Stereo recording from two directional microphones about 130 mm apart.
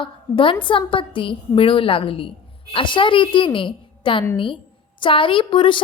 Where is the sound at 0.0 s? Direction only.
40° left (ahead or behind).